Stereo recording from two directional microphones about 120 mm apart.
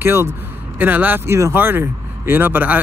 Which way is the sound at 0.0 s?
20° right (ahead or behind).